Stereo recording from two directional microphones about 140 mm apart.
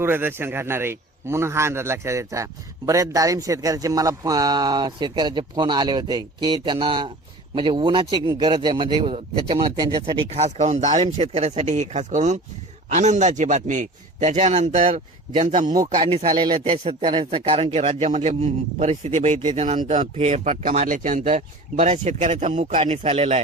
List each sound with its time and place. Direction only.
0.0 s a man's voice: 15° right (ahead or behind); by 10.2 s 30° right (ahead or behind)
10.2 s a man's voice: 50° right (ahead or behind)
16.3 s a man's voice: 30° right (ahead or behind); by 22.8 s 65° right (ahead or behind)
22.8 s a man's voice: 40° right (ahead or behind)